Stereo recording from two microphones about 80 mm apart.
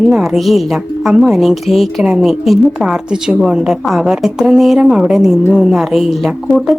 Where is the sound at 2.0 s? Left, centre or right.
Centre.